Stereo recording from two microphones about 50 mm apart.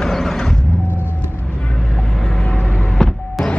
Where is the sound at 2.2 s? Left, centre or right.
Centre.